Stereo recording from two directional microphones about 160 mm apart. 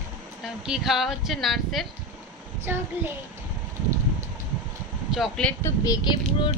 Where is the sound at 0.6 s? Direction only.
Centre (ahead or behind).